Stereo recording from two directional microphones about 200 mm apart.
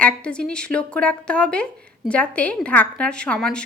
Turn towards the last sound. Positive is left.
turn(degrees=5)  # may be behind; listen again after turning